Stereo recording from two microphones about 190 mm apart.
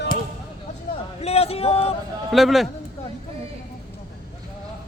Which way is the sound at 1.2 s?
30° left (ahead or behind).